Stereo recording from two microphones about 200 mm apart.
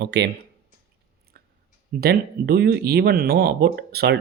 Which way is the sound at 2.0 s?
50° right (ahead or behind).